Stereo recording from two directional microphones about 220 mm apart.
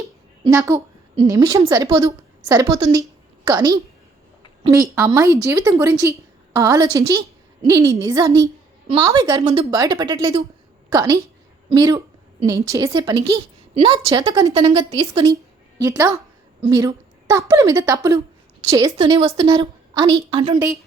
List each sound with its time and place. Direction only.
0.0 s a sound: 15° right (ahead or behind)
1.2 s a woman's voice: 15° right (ahead or behind)
18.9 s a woman's voice: 25° right (ahead or behind)